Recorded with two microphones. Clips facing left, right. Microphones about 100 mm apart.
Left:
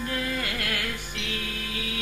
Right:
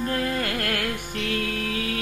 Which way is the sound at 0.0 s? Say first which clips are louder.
Right 4 dB; 45° right (ahead or behind).